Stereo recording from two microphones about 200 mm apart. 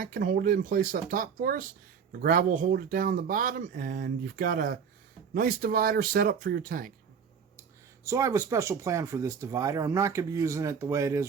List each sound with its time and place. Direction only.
0.0 s speech: 45° right (ahead or behind)
8.0 s speech: 15° right (ahead or behind)